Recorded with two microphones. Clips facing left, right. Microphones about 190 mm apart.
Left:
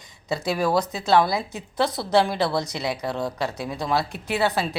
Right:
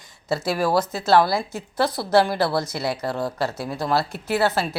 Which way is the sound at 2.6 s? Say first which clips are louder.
Right 1 dB; 15° left (ahead or behind).